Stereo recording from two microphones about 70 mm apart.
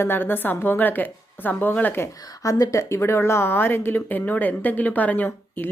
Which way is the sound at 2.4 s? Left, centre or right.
Left.